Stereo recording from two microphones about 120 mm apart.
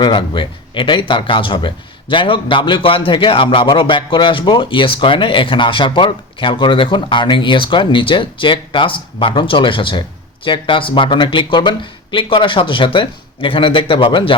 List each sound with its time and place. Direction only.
0.0 s speech: 45° left (ahead or behind)